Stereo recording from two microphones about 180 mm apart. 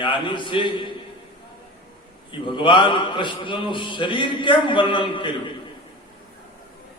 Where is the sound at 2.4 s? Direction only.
25° left (ahead or behind).